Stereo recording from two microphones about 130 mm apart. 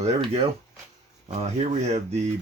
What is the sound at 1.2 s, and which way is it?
Speech, 60° right (ahead or behind).